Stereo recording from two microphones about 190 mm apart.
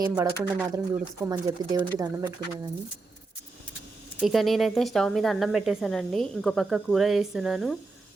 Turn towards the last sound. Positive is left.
turn(degrees=0)  # may be behind; listen again after turning